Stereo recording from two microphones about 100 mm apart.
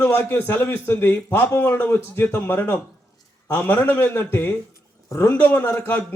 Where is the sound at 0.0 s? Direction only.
20° left (ahead or behind).